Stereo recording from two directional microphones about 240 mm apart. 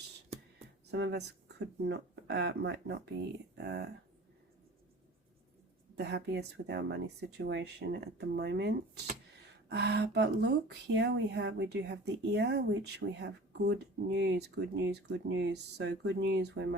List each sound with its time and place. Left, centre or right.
0.9 s speech: right
6.0 s speech: right